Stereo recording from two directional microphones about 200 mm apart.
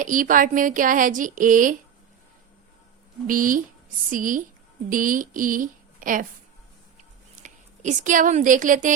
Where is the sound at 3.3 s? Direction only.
45° right (ahead or behind).